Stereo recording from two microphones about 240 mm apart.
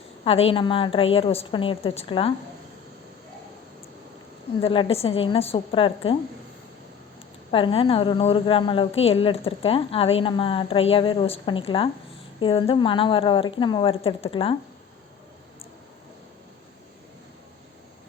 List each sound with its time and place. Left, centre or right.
0.3 s a woman's voice: left
4.6 s a woman's voice: left
7.5 s a woman's voice: left